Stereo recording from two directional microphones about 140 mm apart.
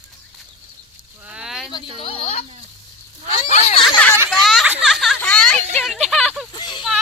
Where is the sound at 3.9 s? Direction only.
15° left (ahead or behind).